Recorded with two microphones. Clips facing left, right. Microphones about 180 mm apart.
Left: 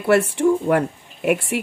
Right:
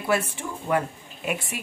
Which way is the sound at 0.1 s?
70° left (ahead or behind).